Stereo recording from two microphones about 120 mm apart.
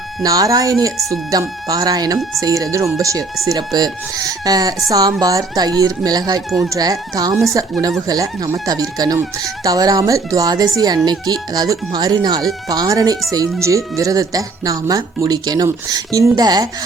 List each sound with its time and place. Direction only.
0.2 s speech: 30° right (ahead or behind)